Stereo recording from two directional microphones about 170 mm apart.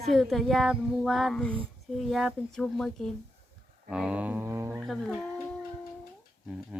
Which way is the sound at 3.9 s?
5° right (ahead or behind).